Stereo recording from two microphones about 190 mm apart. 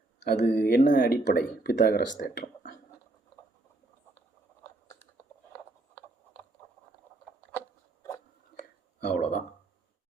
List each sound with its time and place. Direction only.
0.3 s speech: 60° left (ahead or behind)
0.9 s speech: 55° left (ahead or behind)
8.5 s whispering: 65° left (ahead or behind)
9.0 s speech: 40° left (ahead or behind)